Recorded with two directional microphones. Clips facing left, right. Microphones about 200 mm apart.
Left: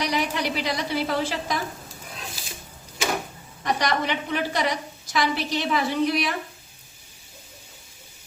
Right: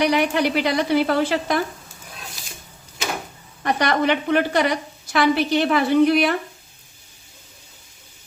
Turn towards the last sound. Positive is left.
turn(degrees=-60)  # may be behind; listen again after turning